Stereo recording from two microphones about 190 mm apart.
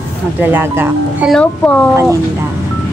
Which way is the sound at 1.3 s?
10° left (ahead or behind).